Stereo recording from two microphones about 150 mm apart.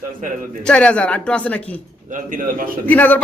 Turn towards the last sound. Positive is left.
turn(degrees=10)  # may be behind; listen again after turning